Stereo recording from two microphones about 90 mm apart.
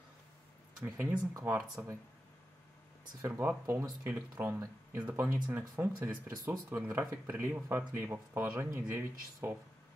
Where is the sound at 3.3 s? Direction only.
15° right (ahead or behind).